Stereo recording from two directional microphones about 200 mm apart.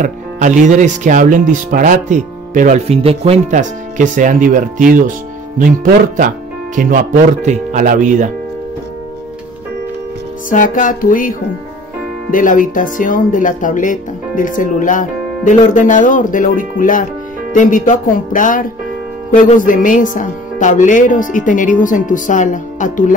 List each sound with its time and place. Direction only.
0.0 s speech: 40° right (ahead or behind)
6.1 s speech: 40° right (ahead or behind)
10.5 s speech: 40° left (ahead or behind)